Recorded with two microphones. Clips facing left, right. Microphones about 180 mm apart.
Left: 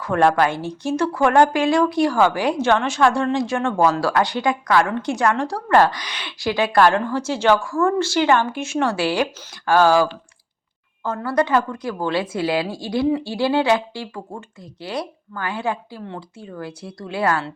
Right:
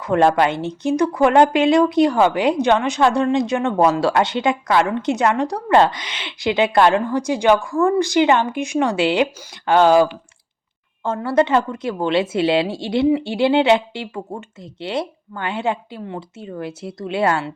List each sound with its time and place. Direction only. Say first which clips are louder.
0.0 s speech: right 2 dB; 20° right (ahead or behind)